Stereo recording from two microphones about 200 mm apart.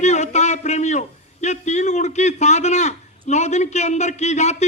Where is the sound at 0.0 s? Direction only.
35° left (ahead or behind).